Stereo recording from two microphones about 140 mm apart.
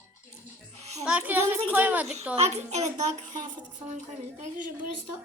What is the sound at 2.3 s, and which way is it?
A woman's voice, 50° right (ahead or behind).